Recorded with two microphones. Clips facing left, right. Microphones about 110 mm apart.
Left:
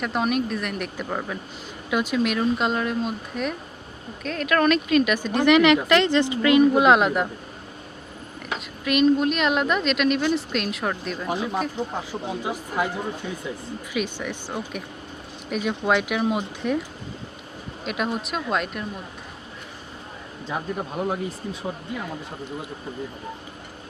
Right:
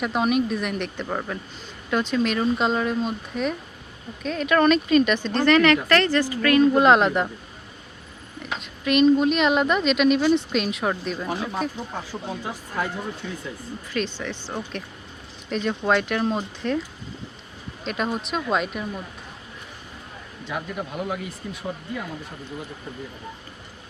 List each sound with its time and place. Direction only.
0.0 s a woman's voice: centre (ahead or behind); by 6.7 s 20° left (ahead or behind)
6.7 s a woman's voice: 5° left (ahead or behind)
8.5 s a woman's voice: centre (ahead or behind)
11.3 s speech: 15° left (ahead or behind)
17.8 s a woman's voice: 5° left (ahead or behind)
20.5 s speech: 35° left (ahead or behind)